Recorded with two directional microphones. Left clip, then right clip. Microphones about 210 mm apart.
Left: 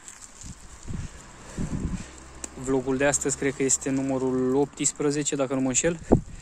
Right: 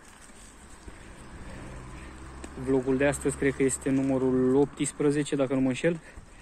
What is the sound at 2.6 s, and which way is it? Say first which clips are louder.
Speech: left 1 dB; 25° left (ahead or behind).